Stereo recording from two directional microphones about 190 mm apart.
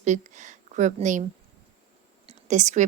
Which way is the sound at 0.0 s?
40° right (ahead or behind).